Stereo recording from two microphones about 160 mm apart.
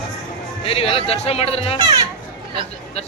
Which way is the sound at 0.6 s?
35° left (ahead or behind).